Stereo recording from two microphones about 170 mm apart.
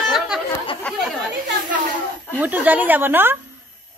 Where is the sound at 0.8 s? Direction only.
5° left (ahead or behind).